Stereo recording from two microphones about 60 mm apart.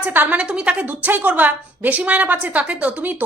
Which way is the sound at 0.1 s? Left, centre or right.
Right.